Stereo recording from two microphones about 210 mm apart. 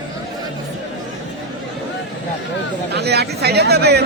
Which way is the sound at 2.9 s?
50° right (ahead or behind).